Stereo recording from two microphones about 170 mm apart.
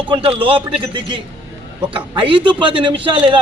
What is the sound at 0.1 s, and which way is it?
Speech, 30° right (ahead or behind).